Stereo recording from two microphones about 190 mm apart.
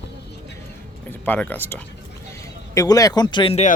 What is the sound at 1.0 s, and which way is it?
Speech, 10° left (ahead or behind).